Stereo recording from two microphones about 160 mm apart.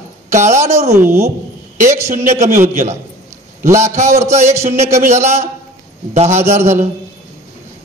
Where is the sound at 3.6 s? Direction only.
15° right (ahead or behind).